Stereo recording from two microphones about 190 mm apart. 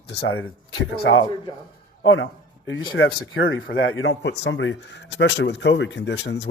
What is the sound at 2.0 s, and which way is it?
Speech, 90° left.